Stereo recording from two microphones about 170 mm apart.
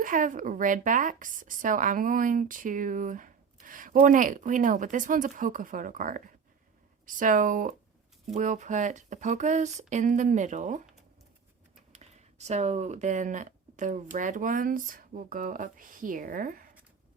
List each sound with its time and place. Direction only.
0.0 s speech: 50° right (ahead or behind)
11.9 s speech: 40° right (ahead or behind)